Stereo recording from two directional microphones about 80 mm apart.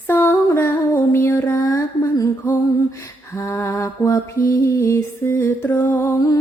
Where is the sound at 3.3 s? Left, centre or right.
Left.